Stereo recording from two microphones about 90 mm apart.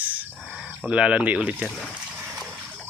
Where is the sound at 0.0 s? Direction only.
15° right (ahead or behind).